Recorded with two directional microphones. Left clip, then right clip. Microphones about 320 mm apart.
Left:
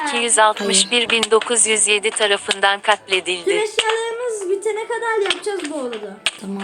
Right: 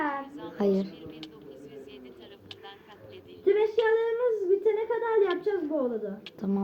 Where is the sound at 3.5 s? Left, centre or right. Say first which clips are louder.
Left 4 dB; centre.